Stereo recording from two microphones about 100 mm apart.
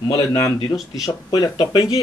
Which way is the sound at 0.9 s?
40° left (ahead or behind).